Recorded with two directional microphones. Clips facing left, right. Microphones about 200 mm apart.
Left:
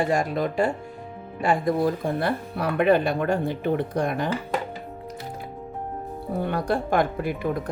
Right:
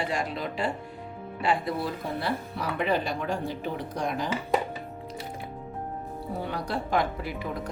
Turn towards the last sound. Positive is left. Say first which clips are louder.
# left 7 dB
turn(degrees=50)  # may be behind; listen again after turning